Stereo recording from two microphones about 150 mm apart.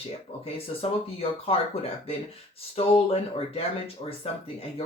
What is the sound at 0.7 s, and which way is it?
Speech, 40° left (ahead or behind).